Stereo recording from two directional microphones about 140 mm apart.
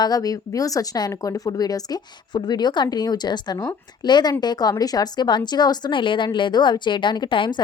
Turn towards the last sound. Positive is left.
turn(degrees=35)  # may be behind; listen again after turning